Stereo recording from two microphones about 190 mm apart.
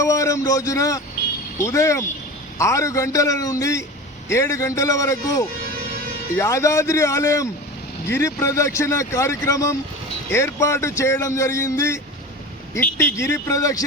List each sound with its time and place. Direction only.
0.0 s a man's voice: 15° left (ahead or behind)